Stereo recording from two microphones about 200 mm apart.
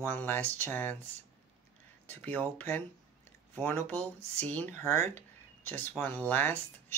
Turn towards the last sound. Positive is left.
turn(degrees=10)  # may be behind; listen again after turning